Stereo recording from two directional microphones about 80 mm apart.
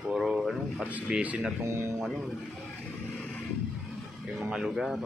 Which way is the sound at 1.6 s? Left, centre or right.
Right.